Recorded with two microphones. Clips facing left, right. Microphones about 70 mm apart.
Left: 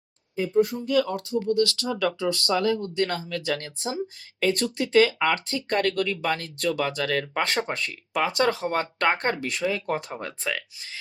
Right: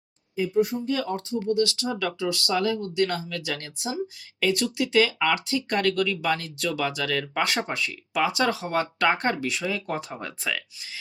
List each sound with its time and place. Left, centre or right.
0.6 s speech: right
2.0 s speech: left